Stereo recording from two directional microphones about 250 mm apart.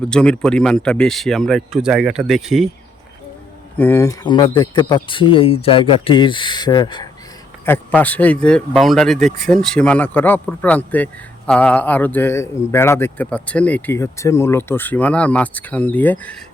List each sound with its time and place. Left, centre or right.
0.1 s speech: centre
3.8 s speech: centre